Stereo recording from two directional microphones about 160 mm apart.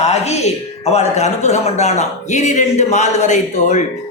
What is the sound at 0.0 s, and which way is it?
A man's voice, 40° left (ahead or behind).